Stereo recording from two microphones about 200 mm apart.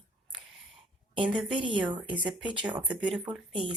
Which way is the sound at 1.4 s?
25° right (ahead or behind).